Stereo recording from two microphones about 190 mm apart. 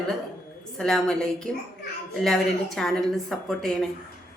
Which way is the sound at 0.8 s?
5° left (ahead or behind).